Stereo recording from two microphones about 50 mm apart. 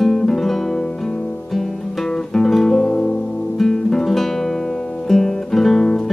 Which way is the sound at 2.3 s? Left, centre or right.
Centre.